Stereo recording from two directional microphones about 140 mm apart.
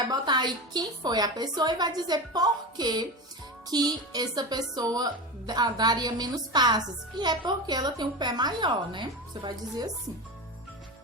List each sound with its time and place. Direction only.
0.1 s speech: 30° right (ahead or behind)